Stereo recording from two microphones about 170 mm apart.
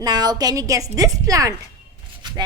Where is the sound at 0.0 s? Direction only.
25° right (ahead or behind).